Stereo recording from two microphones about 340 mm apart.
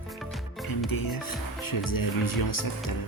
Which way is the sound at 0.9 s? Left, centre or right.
Left.